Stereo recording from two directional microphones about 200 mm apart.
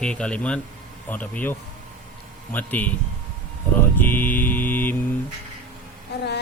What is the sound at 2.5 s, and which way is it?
Speech, 10° left (ahead or behind).